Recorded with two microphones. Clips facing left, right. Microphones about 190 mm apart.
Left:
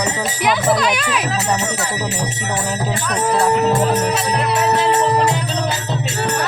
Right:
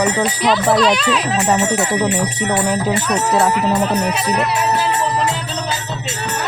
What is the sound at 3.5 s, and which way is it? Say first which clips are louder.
Music: left 1 dB; 45° left (ahead or behind).